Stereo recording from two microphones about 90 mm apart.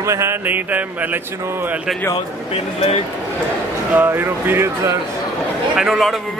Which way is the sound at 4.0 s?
25° right (ahead or behind).